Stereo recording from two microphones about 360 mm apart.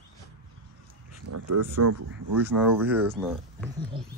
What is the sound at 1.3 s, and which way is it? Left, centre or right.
Speech, right.